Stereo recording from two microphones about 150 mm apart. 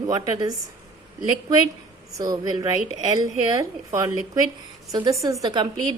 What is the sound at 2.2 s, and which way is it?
A woman's voice, 25° right (ahead or behind).